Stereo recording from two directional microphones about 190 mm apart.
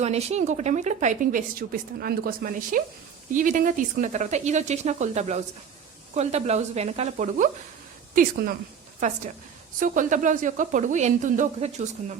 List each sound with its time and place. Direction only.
0.0 s a woman's voice: 35° right (ahead or behind)